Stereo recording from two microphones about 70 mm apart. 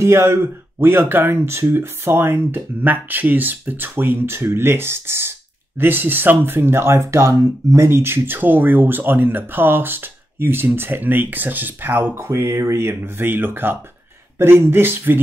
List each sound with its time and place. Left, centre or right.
0.0 s speech: right
12.3 s speech: right